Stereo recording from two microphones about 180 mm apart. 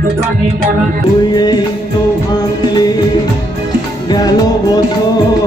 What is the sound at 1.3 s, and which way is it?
Music, 25° left (ahead or behind).